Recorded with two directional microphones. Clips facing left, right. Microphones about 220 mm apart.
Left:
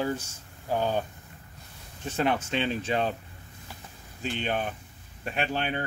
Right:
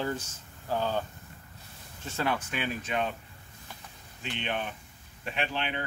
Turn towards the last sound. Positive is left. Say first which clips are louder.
# left 3 dB
turn(degrees=45)  # may be behind; listen again after turning